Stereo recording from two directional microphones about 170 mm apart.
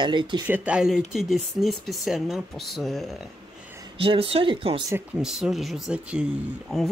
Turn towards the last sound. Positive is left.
turn(degrees=0)  # may be behind; listen again after turning